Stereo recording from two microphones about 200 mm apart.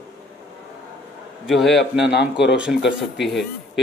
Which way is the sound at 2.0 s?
60° left (ahead or behind).